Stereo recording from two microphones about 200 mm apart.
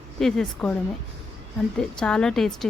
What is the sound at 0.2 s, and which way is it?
Speech, centre (ahead or behind).